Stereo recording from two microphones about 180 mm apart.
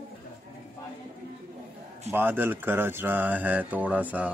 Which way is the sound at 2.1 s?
10° right (ahead or behind).